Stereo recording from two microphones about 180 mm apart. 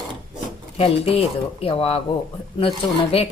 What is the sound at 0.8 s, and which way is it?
Speech, 30° left (ahead or behind).